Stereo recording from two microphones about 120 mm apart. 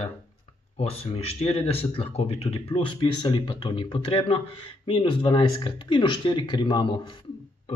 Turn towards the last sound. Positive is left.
turn(degrees=45)  # may be behind; listen again after turning